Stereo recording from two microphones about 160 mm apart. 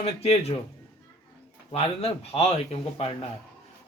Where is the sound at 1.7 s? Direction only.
40° left (ahead or behind).